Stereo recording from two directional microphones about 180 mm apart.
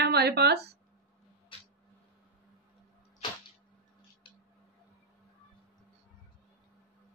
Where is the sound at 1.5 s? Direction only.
30° left (ahead or behind).